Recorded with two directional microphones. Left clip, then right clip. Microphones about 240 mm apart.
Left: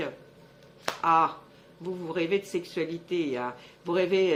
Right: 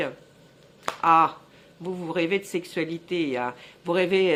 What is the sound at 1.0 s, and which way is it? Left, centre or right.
Speech, right.